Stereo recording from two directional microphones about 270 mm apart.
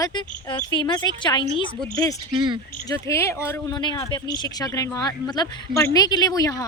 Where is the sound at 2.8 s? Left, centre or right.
Centre.